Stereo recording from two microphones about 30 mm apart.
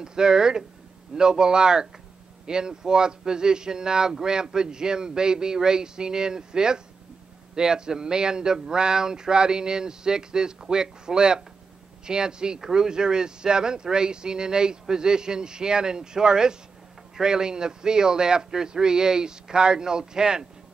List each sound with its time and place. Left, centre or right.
0.0 s speech: right